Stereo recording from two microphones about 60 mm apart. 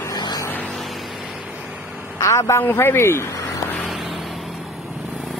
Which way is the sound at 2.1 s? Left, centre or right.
Left.